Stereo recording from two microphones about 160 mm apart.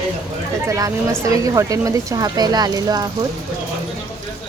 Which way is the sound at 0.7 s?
20° right (ahead or behind).